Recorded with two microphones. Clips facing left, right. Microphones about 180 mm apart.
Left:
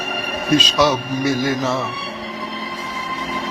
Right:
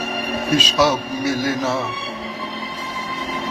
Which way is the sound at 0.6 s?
10° right (ahead or behind).